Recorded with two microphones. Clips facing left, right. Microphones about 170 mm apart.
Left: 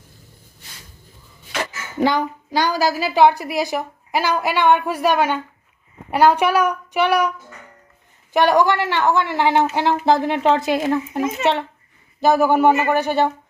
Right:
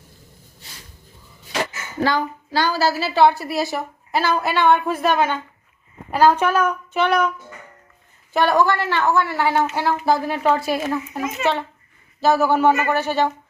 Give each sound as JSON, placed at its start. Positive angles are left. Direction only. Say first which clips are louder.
{"t": 2.0, "sound": "a woman's voice", "louder": "left 2 dB", "side_deg": 20}